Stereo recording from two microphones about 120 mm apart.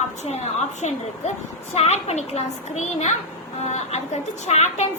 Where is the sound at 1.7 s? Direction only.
60° left (ahead or behind).